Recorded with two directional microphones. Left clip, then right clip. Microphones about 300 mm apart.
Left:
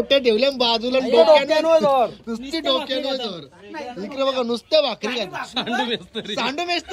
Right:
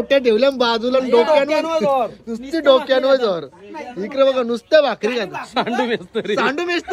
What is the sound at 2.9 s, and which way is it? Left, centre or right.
Speech, centre.